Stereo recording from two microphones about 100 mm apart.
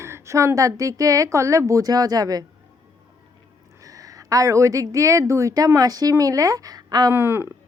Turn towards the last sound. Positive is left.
turn(degrees=-25)  # may be behind; listen again after turning